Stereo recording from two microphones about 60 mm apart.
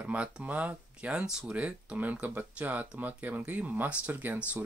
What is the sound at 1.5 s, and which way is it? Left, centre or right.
Speech, right.